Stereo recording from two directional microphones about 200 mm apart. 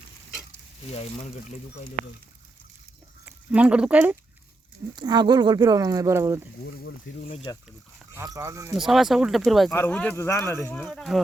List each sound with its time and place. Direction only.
0.9 s speech: 30° left (ahead or behind)
3.2 s speech: 5° right (ahead or behind)
4.9 s speech: 20° right (ahead or behind)
6.7 s speech: 60° left (ahead or behind)
7.5 s speech: 20° left (ahead or behind)
8.1 s speech: 15° right (ahead or behind)
8.7 s speech: centre (ahead or behind)